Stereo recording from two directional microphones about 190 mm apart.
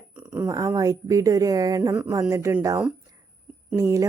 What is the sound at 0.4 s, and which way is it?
Speech, 20° right (ahead or behind).